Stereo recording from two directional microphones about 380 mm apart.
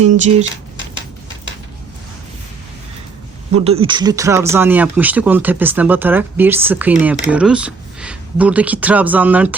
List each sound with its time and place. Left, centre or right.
0.0 s speech: centre
3.5 s speech: centre